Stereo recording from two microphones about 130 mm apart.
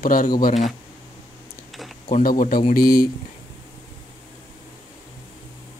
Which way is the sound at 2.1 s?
90° left.